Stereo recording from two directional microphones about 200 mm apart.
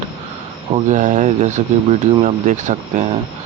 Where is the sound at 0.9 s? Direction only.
35° right (ahead or behind).